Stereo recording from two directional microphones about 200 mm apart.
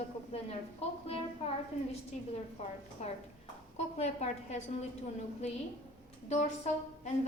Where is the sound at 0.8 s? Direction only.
30° left (ahead or behind).